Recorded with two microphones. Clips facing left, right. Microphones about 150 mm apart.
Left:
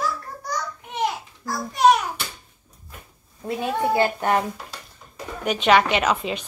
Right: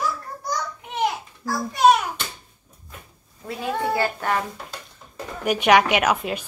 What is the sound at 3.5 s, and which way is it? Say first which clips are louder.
Speech: left 2 dB; 20° left (ahead or behind).